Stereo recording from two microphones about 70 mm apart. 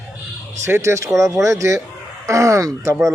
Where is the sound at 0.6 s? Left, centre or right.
Right.